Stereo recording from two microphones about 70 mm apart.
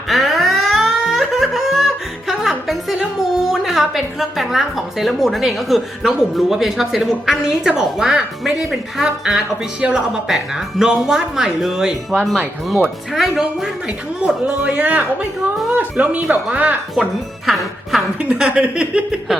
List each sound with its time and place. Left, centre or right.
0.1 s laughter: centre
2.2 s a woman's voice: centre
12.1 s a woman's voice: centre
17.4 s music: centre
18.2 s speech: centre